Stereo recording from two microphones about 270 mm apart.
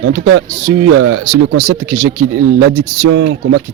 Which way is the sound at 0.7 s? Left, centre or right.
Right.